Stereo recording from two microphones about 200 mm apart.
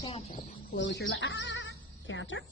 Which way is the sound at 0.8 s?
65° left (ahead or behind).